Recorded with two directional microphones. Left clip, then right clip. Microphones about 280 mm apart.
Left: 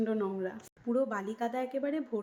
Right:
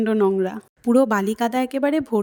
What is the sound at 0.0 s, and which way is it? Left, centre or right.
A woman's voice, right.